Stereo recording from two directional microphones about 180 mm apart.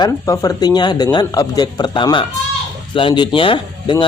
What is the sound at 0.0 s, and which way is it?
Speech, 20° left (ahead or behind).